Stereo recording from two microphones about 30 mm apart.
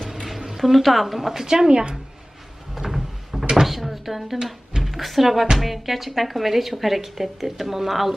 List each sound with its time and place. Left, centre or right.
0.1 s a woman's voice: centre
1.7 s speech: right
2.7 s a sound: centre
3.7 s a woman's voice: centre